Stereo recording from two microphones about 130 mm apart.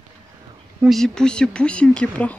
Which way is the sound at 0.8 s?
5° left (ahead or behind).